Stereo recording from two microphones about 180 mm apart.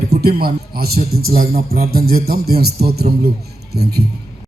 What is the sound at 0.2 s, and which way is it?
A man's voice, 60° right (ahead or behind).